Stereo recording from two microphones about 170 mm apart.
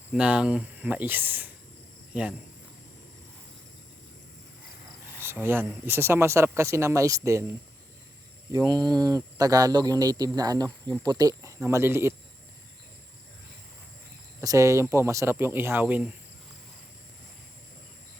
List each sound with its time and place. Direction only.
0.1 s speech: 5° right (ahead or behind)
5.2 s speech: 15° right (ahead or behind)
8.5 s speech: 25° right (ahead or behind)
14.4 s speech: 20° right (ahead or behind)